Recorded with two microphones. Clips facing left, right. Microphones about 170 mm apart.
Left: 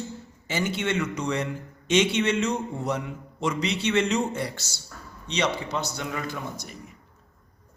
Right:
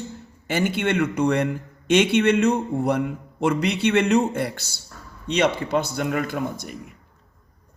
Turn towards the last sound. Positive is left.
turn(degrees=-55)  # may be behind; listen again after turning